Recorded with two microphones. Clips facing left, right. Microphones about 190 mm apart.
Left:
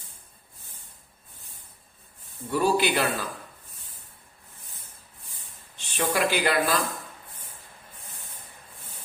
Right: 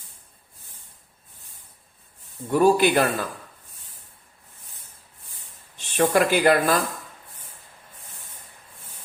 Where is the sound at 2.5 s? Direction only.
50° right (ahead or behind).